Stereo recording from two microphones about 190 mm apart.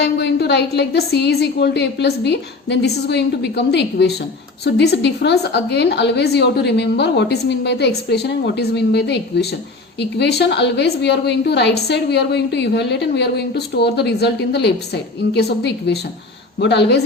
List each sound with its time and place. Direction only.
0.0 s a woman's voice: 65° left (ahead or behind)